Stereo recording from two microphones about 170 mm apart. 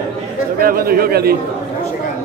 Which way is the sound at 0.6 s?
60° right (ahead or behind).